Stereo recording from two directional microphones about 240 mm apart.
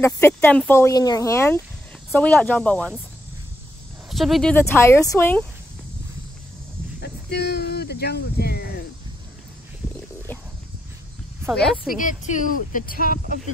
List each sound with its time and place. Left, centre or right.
0.0 s speech: centre
4.1 s speech: centre
7.0 s a sound: left
11.9 s speech: left